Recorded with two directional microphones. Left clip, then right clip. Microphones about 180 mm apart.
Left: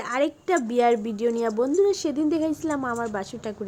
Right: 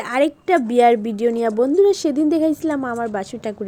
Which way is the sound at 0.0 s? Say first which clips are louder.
Right 6 dB; 25° right (ahead or behind).